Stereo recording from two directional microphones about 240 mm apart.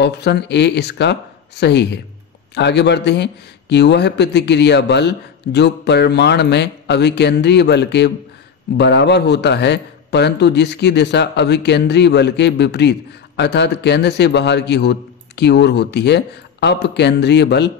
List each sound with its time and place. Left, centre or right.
0.0 s speech: left